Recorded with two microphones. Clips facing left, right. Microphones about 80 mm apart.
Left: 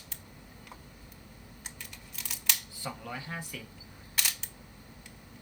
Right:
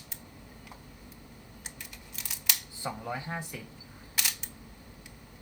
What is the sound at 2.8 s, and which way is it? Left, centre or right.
Speech, centre.